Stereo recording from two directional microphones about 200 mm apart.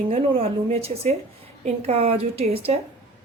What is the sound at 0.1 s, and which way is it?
A woman's voice, 25° right (ahead or behind).